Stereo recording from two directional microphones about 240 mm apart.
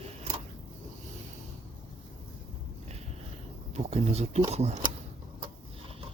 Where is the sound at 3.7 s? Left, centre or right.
Right.